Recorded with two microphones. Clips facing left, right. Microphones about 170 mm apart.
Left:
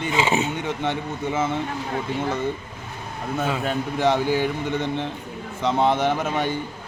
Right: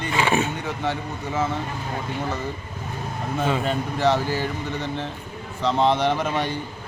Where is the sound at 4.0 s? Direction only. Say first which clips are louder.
Left 2 dB; 15° left (ahead or behind).